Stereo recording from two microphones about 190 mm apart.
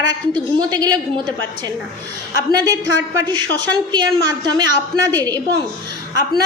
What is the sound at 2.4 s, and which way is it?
A woman's voice, 20° right (ahead or behind).